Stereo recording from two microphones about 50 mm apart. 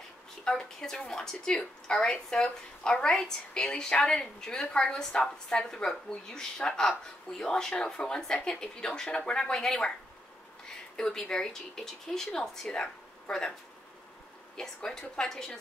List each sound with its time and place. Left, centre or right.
0.5 s speech: centre
11.0 s speech: centre
14.6 s speech: centre